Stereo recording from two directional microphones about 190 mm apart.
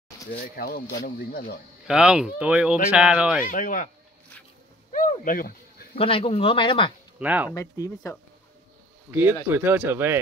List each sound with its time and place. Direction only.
0.3 s speech: 50° left (ahead or behind)
1.9 s speech: 5° right (ahead or behind)
3.4 s speech: 45° left (ahead or behind)
4.9 s a sound: 45° left (ahead or behind)
5.9 s speech: 30° left (ahead or behind)
7.2 s speech: 10° right (ahead or behind)
7.5 s speech: 15° left (ahead or behind)
9.1 s speech: 10° right (ahead or behind)